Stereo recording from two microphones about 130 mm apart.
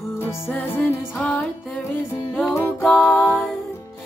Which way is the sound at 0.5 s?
10° left (ahead or behind).